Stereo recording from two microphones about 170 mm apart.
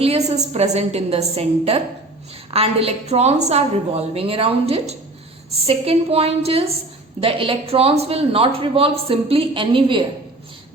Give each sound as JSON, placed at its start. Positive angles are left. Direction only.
{"t": 0.0, "sound": "speech", "side_deg": -40}